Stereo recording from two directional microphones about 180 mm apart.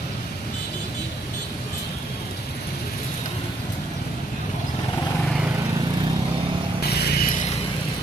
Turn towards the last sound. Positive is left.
turn(degrees=60)  # may be behind; listen again after turning